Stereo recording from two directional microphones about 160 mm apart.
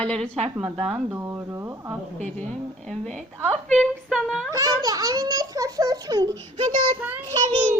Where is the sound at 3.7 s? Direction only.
5° left (ahead or behind).